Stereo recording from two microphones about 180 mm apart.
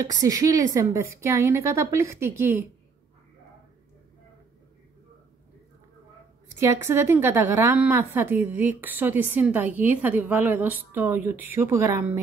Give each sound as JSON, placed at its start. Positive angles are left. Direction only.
{"t": 0.2, "sound": "a woman's voice", "side_deg": -20}
{"t": 6.6, "sound": "a woman's voice", "side_deg": -15}